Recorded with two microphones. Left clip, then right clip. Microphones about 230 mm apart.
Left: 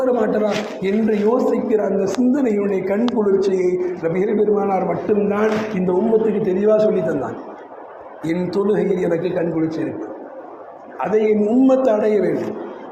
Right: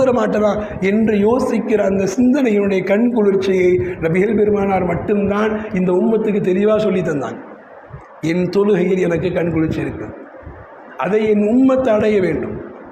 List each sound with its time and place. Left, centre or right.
0.0 s a man's voice: right
10.9 s a man's voice: right